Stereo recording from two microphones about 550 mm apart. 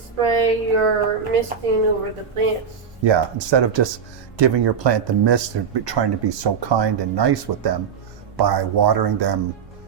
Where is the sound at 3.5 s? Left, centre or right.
Right.